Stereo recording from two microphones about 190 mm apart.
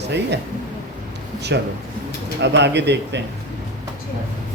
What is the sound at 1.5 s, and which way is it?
Speech, 65° right (ahead or behind).